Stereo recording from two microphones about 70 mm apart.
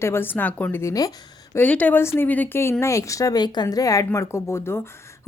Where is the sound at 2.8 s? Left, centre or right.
Left.